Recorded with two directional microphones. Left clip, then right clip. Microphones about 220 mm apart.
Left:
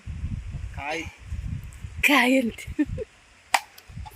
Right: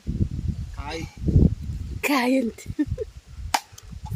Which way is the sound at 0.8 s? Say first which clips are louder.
Left 4 dB; 65° right (ahead or behind).